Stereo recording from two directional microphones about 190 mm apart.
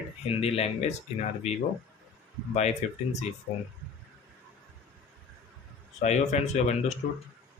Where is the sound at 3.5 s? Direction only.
50° left (ahead or behind).